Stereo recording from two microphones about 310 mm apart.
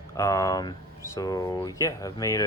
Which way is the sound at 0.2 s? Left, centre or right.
Centre.